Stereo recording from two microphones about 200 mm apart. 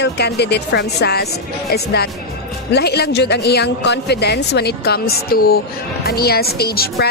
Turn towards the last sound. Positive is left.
turn(degrees=50)  # may be behind; listen again after turning